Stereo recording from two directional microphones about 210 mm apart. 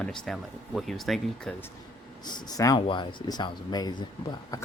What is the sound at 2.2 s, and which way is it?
Speech, 20° left (ahead or behind).